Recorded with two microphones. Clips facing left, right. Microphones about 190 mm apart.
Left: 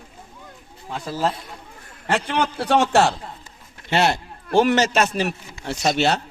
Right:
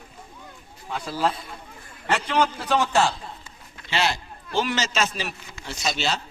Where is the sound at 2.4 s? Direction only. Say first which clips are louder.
Left 3 dB; 70° left (ahead or behind).